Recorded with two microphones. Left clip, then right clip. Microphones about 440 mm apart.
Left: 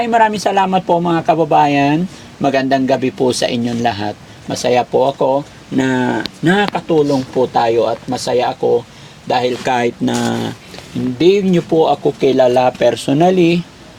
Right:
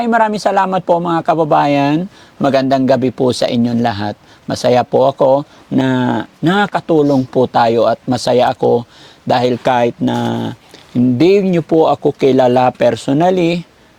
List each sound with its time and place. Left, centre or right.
0.0 s speech: right
9.7 s speech: right
11.2 s speech: right